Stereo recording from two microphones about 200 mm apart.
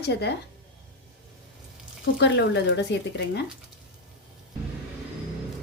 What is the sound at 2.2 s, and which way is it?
A woman's voice, 60° left (ahead or behind).